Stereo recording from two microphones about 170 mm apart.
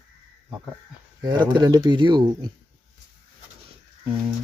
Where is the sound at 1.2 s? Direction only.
25° right (ahead or behind).